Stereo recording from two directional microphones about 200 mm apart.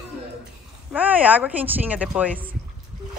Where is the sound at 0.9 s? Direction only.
10° right (ahead or behind).